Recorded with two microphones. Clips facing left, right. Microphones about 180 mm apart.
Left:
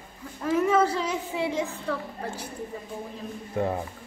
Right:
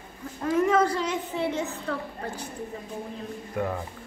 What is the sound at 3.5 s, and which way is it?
Speech, 30° left (ahead or behind).